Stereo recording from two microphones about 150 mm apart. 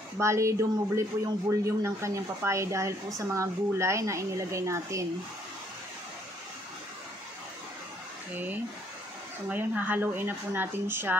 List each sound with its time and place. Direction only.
0.2 s speech: 20° right (ahead or behind)
9.5 s speech: 10° right (ahead or behind)